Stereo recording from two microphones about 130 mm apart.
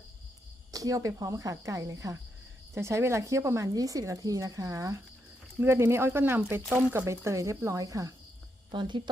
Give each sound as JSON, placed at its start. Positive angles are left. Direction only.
{"t": 0.7, "sound": "a woman's voice", "side_deg": -25}
{"t": 8.7, "sound": "speech", "side_deg": -40}